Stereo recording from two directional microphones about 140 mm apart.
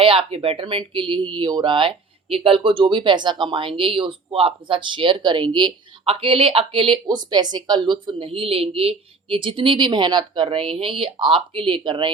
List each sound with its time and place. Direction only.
0.0 s speech: 40° right (ahead or behind)